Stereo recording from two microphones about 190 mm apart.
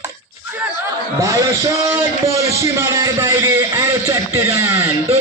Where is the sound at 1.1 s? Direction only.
15° right (ahead or behind).